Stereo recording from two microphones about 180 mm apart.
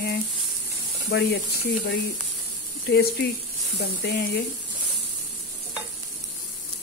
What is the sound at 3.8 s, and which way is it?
Speech, 70° left (ahead or behind).